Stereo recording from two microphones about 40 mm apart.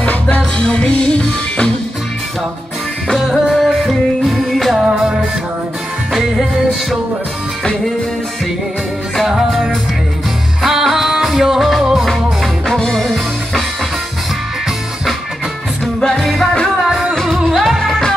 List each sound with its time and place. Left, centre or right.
0.0 s music: left
0.6 s music: left
3.4 s music: centre
4.7 s music: right
6.1 s music: centre
9.3 s music: centre
12.6 s music: centre
15.8 s music: centre
16.8 s music: centre